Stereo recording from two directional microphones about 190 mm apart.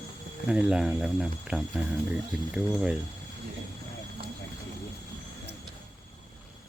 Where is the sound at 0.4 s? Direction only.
5° right (ahead or behind).